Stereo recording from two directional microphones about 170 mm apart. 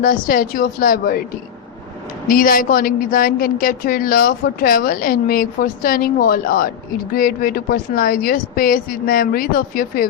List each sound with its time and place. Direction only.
0.0 s a woman's voice: 55° left (ahead or behind)
2.2 s a woman's voice: 55° left (ahead or behind)